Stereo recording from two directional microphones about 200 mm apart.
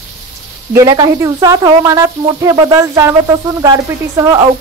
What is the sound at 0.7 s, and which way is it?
Speech, 20° right (ahead or behind).